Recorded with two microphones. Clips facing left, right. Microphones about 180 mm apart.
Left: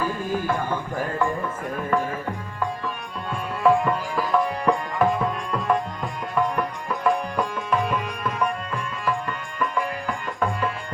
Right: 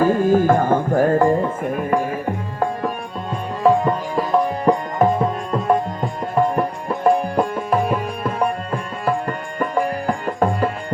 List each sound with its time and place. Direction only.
0.0 s music: 45° right (ahead or behind)
1.4 s tabla: 20° right (ahead or behind)
3.6 s music: 35° right (ahead or behind)
4.4 s tabla: 40° right (ahead or behind)
5.0 s music: 30° right (ahead or behind)
7.3 s music: 45° right (ahead or behind)